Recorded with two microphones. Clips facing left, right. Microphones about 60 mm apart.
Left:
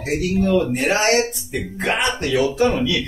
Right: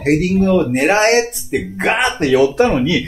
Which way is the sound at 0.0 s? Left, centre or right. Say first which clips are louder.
Right 8 dB; right.